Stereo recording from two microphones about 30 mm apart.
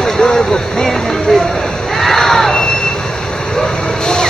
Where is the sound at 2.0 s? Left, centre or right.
Centre.